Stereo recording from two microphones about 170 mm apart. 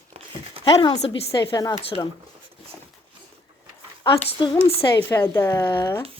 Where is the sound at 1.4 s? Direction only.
20° left (ahead or behind).